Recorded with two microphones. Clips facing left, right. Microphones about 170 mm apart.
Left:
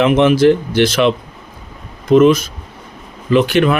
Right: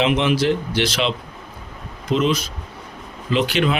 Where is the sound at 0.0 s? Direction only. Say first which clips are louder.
Left 8 dB; 50° left (ahead or behind).